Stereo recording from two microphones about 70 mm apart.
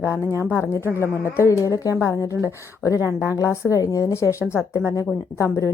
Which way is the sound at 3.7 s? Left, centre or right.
Left.